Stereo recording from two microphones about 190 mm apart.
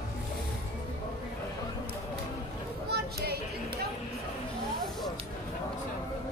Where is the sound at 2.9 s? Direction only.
55° right (ahead or behind).